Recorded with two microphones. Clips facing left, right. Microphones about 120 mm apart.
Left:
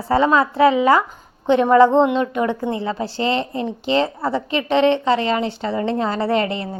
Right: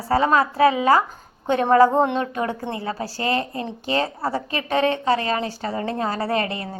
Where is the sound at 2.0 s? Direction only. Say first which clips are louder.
Left 4 dB; 35° right (ahead or behind).